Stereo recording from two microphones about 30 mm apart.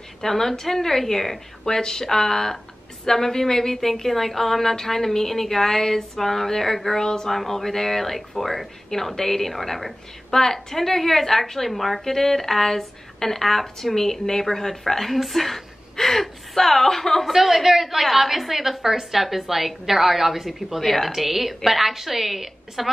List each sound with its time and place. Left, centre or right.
0.2 s a woman's voice: centre
1.6 s a woman's voice: left
7.2 s a woman's voice: centre
10.3 s a woman's voice: centre
17.3 s a woman's voice: centre